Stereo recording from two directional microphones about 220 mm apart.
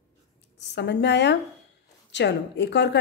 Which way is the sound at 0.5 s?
50° left (ahead or behind).